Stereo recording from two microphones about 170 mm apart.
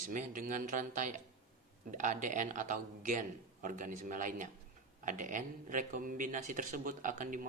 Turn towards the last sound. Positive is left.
turn(degrees=-50)  # may be behind; listen again after turning